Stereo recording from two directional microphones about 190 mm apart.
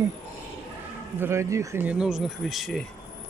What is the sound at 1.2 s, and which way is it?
Speech, 15° right (ahead or behind).